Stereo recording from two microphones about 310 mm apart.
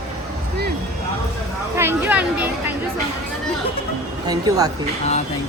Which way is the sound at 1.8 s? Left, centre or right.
Centre.